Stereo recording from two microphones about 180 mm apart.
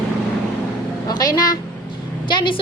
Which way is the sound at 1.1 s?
20° left (ahead or behind).